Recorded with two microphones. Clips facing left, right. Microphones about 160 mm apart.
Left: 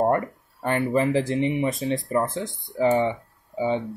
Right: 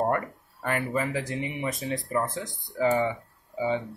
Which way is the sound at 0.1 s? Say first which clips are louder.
Left 5 dB; 30° left (ahead or behind).